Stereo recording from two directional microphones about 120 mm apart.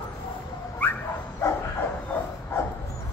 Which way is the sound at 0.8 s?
15° left (ahead or behind).